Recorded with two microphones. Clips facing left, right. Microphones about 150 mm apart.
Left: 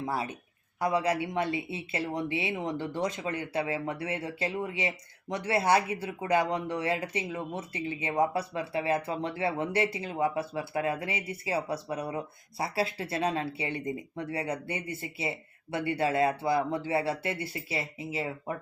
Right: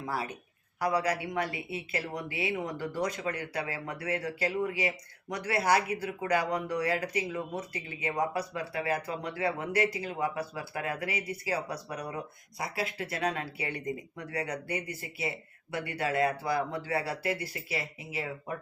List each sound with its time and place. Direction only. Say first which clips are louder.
0.0 s speech: left 2 dB; 25° left (ahead or behind)